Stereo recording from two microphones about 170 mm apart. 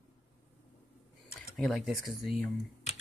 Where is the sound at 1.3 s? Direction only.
5° left (ahead or behind).